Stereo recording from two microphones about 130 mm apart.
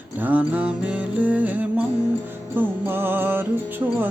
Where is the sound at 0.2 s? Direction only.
15° right (ahead or behind).